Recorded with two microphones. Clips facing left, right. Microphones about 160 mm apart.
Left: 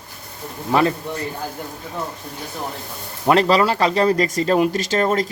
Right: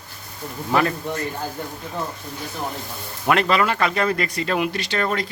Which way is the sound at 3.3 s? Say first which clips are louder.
Left 4 dB; 35° left (ahead or behind).